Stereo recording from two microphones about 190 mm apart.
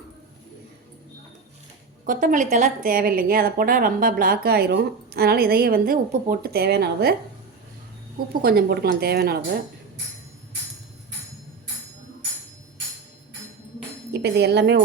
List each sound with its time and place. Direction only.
2.0 s a woman's voice: 45° right (ahead or behind)
8.3 s a woman's voice: 50° right (ahead or behind)
14.1 s speech: 60° right (ahead or behind)